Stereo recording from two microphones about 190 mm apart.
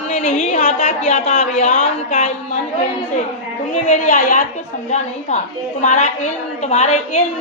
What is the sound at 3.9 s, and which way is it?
A woman's voice, 45° left (ahead or behind).